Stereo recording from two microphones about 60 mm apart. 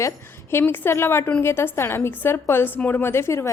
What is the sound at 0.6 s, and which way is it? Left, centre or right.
A woman's voice, left.